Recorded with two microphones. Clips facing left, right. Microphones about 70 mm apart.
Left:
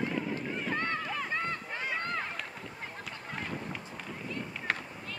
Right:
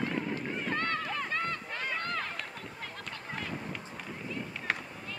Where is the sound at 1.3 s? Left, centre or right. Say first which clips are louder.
Even; centre.